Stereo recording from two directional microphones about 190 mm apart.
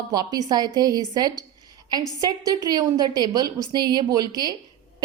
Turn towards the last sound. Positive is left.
turn(degrees=-20)  # may be behind; listen again after turning